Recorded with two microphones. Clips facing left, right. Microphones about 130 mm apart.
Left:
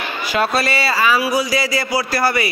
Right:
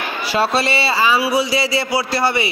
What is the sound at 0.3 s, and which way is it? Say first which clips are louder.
A man's voice: right 1 dB; 30° right (ahead or behind).